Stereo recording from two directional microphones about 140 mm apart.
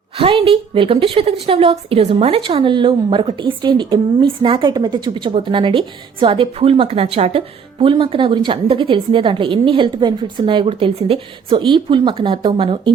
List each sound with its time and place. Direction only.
0.2 s a woman's voice: 40° right (ahead or behind)